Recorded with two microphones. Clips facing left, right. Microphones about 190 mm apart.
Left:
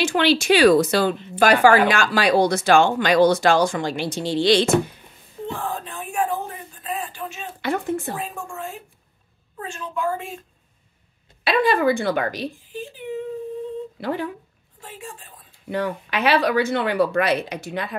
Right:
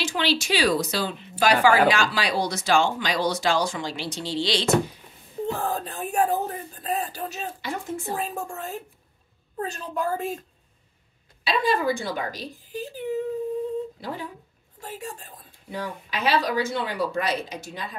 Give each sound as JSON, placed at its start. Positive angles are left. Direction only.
{"t": 0.0, "sound": "speech", "side_deg": 55}
{"t": 5.5, "sound": "a sound", "side_deg": -40}
{"t": 7.6, "sound": "speech", "side_deg": 60}
{"t": 8.2, "sound": "a woman's voice", "side_deg": -40}
{"t": 11.4, "sound": "speech", "side_deg": 65}
{"t": 12.7, "sound": "a woman's voice", "side_deg": -40}
{"t": 13.9, "sound": "speech", "side_deg": 65}
{"t": 14.8, "sound": "a woman's voice", "side_deg": -40}
{"t": 15.7, "sound": "speech", "side_deg": 65}